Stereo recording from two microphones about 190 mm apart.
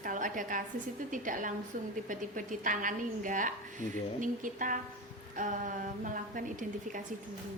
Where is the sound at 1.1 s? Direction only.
45° right (ahead or behind).